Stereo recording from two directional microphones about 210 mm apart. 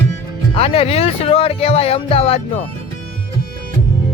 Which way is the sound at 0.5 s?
30° left (ahead or behind).